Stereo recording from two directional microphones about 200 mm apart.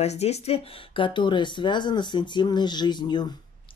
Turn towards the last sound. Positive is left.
turn(degrees=20)  # may be behind; listen again after turning